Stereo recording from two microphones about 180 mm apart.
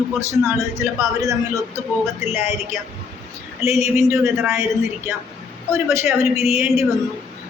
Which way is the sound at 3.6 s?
15° right (ahead or behind).